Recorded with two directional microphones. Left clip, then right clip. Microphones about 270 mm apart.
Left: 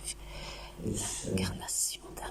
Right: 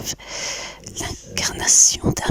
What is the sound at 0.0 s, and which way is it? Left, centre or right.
Speech, right.